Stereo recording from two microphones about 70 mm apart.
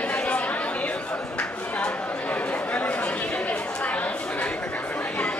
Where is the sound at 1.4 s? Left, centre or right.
Centre.